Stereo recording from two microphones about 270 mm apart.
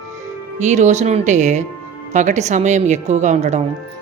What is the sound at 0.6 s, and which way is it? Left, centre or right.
A woman's voice, right.